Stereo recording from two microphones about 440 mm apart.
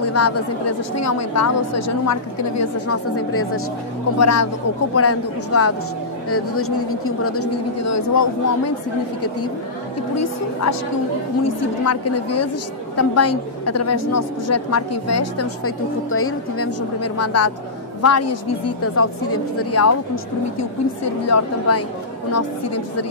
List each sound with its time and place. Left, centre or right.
0.0 s a woman's voice: left
10.1 s a woman's voice: left
11.8 s a woman's voice: left
21.3 s a woman's voice: left